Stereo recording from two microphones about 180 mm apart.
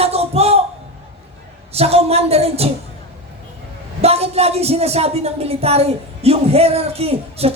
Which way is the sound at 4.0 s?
35° right (ahead or behind).